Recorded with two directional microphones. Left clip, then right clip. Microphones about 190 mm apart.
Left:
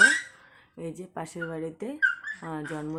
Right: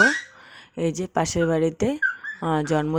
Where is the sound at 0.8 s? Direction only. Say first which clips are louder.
Right 13 dB; 45° right (ahead or behind).